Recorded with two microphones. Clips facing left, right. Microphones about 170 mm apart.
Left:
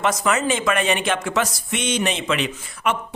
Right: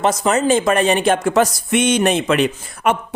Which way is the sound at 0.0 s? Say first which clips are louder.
Right 4 dB; 35° right (ahead or behind).